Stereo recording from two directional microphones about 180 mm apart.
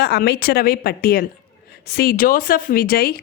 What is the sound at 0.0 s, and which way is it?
A woman's voice, 60° left (ahead or behind).